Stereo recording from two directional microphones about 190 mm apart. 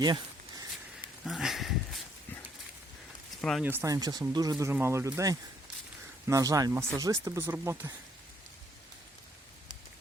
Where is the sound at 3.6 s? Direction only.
15° right (ahead or behind).